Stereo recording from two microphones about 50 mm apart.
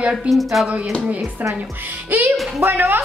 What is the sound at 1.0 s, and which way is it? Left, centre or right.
Speech, right.